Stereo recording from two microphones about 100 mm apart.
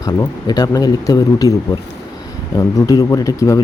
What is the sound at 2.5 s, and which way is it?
Speech, 35° left (ahead or behind).